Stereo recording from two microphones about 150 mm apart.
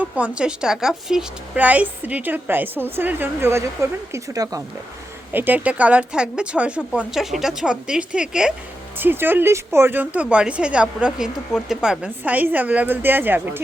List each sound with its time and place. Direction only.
0.0 s speech: 10° right (ahead or behind)
5.3 s a woman's voice: 10° right (ahead or behind)